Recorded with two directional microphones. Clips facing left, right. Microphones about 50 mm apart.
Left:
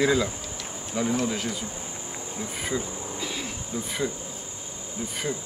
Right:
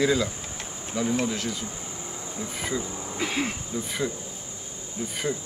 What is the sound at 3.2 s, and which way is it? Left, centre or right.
Speech, right.